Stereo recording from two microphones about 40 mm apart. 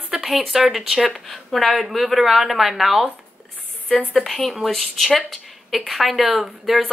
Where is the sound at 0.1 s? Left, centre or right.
Centre.